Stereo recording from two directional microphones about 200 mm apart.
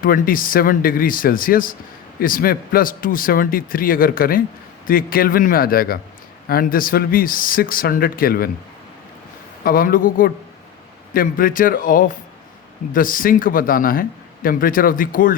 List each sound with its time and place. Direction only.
0.0 s speech: 45° left (ahead or behind)
9.6 s speech: 45° left (ahead or behind)